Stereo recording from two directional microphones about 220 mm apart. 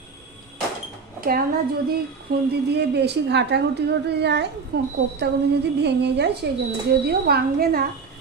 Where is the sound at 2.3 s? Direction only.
45° right (ahead or behind).